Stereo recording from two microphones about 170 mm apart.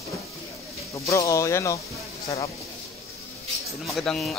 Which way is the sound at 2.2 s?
35° left (ahead or behind).